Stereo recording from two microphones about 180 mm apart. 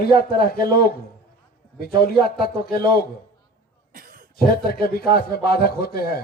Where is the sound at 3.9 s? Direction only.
50° right (ahead or behind).